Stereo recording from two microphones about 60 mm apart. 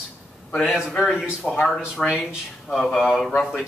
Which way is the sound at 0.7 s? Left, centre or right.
Centre.